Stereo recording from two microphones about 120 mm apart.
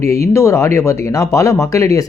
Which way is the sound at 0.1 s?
25° left (ahead or behind).